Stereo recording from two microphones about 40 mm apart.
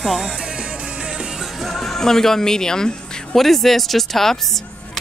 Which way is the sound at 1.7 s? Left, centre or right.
Centre.